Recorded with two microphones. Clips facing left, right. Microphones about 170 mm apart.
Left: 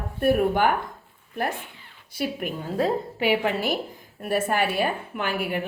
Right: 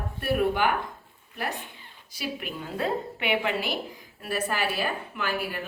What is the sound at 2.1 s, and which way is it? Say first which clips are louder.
A woman's voice: left 6 dB; 50° left (ahead or behind).